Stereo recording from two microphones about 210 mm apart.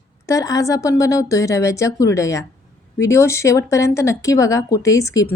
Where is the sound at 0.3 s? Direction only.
15° left (ahead or behind).